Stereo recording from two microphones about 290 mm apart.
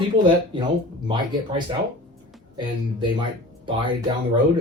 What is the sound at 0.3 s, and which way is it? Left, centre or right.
Speech, centre.